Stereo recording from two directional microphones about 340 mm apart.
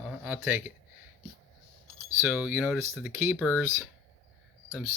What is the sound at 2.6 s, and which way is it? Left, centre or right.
Speech, centre.